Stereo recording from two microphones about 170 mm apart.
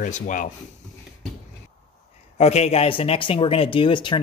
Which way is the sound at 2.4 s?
40° left (ahead or behind).